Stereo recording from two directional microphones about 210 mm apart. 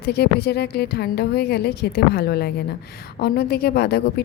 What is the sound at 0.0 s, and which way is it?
A woman's voice, 50° left (ahead or behind).